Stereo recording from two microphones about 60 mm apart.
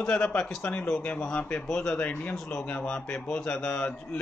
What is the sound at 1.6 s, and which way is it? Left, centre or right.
Speech, centre.